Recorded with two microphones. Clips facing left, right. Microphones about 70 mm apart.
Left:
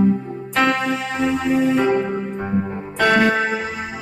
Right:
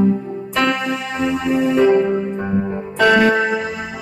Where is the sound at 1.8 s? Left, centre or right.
Left.